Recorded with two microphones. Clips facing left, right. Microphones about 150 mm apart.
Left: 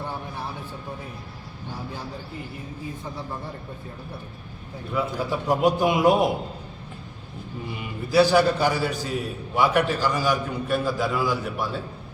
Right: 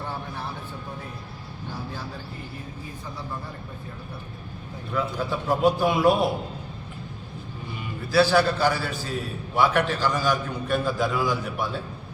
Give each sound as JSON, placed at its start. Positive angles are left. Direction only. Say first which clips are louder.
{"t": 4.9, "sound": "a man's voice", "louder": "left 1 dB", "side_deg": 10}
{"t": 8.1, "sound": "a man's voice", "louder": "left 2 dB", "side_deg": 15}